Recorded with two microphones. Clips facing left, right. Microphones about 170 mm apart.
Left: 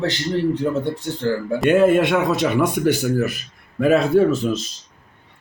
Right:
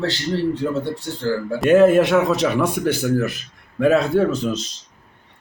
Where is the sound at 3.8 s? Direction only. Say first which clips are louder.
Left 1 dB; 5° left (ahead or behind).